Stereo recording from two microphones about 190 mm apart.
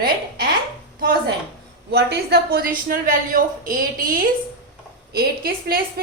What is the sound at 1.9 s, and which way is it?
A woman's voice, 60° right (ahead or behind).